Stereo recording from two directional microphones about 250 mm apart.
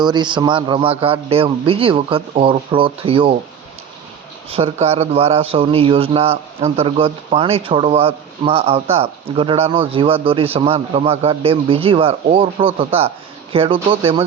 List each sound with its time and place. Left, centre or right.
0.0 s speech: centre
4.4 s speech: right